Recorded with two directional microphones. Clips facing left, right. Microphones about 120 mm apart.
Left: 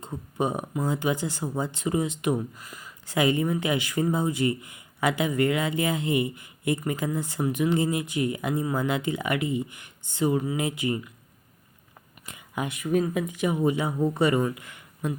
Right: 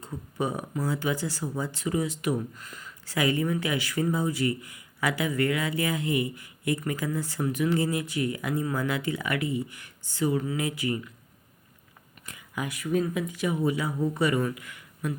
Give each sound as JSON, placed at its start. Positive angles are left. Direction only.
{"t": 0.0, "sound": "speech", "side_deg": 20}
{"t": 2.6, "sound": "speech", "side_deg": 10}
{"t": 12.2, "sound": "a sound", "side_deg": 20}
{"t": 13.2, "sound": "speech", "side_deg": 20}